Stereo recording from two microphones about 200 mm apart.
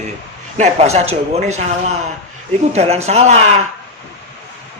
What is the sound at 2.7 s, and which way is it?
Speech, 35° right (ahead or behind).